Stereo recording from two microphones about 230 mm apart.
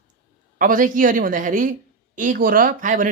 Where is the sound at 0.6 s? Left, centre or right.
Right.